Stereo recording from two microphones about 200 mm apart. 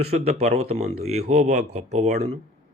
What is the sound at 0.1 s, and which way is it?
A man's voice, 30° right (ahead or behind).